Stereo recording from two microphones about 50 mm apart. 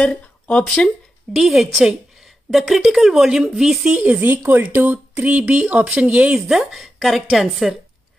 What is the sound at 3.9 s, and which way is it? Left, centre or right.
Speech, right.